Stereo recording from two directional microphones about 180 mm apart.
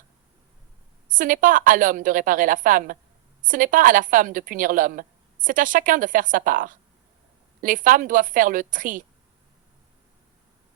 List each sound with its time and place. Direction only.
1.1 s a woman's voice: 50° right (ahead or behind)